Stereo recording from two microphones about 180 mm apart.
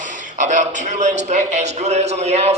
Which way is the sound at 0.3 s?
40° right (ahead or behind).